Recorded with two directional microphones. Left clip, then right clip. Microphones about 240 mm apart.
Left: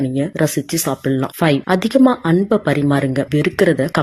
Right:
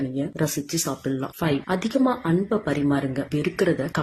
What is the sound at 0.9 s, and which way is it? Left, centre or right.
Speech, left.